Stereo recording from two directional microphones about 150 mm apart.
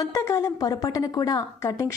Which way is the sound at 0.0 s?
20° left (ahead or behind).